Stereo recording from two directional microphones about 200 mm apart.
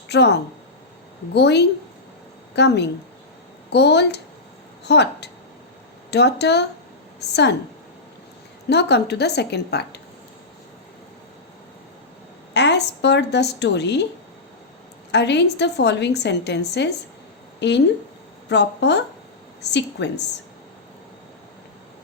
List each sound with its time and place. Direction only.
0.1 s a woman's voice: 55° left (ahead or behind)
8.7 s a woman's voice: 55° left (ahead or behind)
12.5 s a woman's voice: 60° left (ahead or behind)
15.1 s a woman's voice: 60° left (ahead or behind)